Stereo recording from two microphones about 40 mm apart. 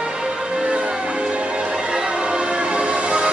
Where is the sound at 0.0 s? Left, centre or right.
Centre.